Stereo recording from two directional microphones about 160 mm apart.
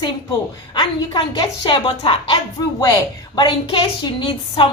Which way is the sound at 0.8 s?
25° left (ahead or behind).